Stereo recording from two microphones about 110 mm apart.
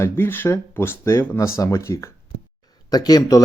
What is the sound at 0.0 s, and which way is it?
Speech, 20° left (ahead or behind).